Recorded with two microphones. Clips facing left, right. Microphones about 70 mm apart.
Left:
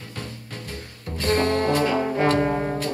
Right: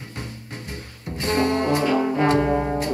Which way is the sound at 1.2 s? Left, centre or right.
Right.